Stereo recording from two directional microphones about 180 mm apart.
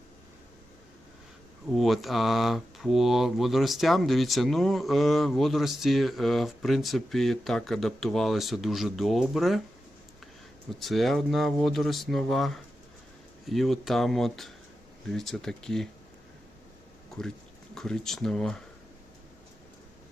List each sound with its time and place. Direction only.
1.7 s speech: centre (ahead or behind)
10.7 s speech: centre (ahead or behind)
17.7 s speech: centre (ahead or behind)